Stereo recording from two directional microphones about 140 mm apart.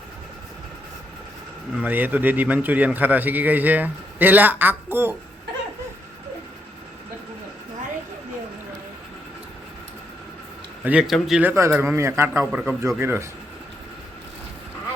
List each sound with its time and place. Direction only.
1.7 s a man's voice: 10° right (ahead or behind)
10.8 s a man's voice: 5° right (ahead or behind)
11.4 s a man's voice: 15° right (ahead or behind)